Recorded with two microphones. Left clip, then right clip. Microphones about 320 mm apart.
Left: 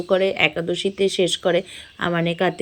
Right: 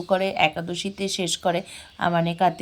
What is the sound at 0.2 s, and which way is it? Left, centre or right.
Speech, centre.